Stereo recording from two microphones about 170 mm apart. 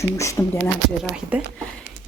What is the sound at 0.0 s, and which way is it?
Speech, 15° left (ahead or behind).